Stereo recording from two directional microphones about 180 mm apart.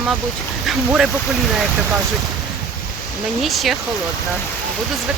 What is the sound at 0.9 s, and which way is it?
Speech, 5° right (ahead or behind).